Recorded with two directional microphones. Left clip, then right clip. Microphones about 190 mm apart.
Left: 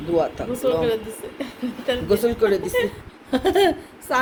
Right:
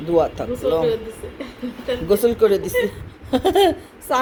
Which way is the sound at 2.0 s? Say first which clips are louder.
Right 4 dB; 25° right (ahead or behind).